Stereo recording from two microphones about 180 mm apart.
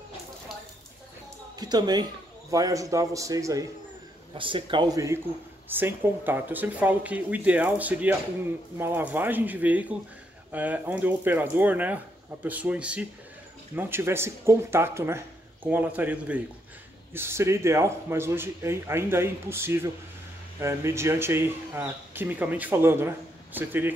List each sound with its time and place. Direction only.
1.6 s speech: 20° right (ahead or behind)
4.3 s speech: 30° right (ahead or behind); by 23.9 s 10° right (ahead or behind)